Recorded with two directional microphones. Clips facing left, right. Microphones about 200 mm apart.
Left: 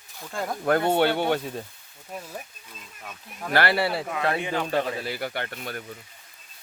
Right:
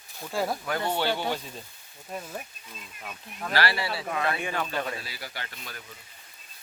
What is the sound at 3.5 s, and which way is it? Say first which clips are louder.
Speech: left 5 dB; 55° left (ahead or behind).